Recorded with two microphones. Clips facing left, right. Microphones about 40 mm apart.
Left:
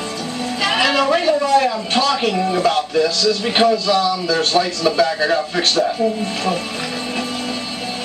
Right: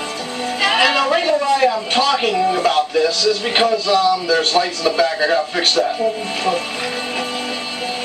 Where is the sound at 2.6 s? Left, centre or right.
Centre.